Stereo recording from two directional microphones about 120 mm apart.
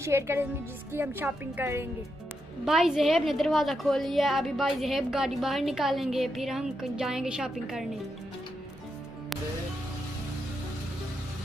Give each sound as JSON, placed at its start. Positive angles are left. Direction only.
{"t": 0.0, "sound": "a woman's voice", "side_deg": -20}
{"t": 2.6, "sound": "a woman's voice", "side_deg": -5}